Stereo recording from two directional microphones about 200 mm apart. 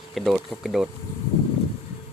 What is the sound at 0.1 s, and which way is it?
Speech, centre (ahead or behind).